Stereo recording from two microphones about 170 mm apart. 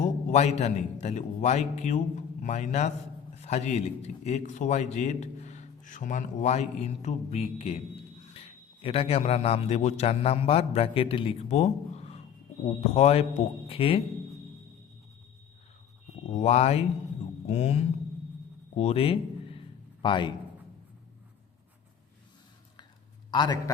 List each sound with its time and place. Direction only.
0.0 s a man's voice: 45° left (ahead or behind)
16.4 s a man's voice: 40° left (ahead or behind)
18.8 s a sound: 35° left (ahead or behind)
23.3 s a man's voice: 25° left (ahead or behind)